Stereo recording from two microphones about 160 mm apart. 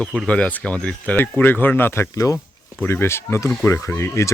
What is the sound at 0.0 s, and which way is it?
Speech, 5° left (ahead or behind).